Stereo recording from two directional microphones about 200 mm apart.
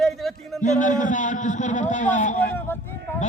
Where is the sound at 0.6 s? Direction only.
40° left (ahead or behind).